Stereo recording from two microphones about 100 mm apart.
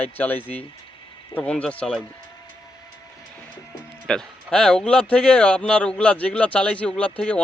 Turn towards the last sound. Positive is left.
turn(degrees=10)  # may be behind; listen again after turning